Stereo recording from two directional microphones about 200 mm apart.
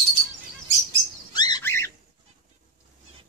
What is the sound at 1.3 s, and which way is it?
Bird, 20° left (ahead or behind).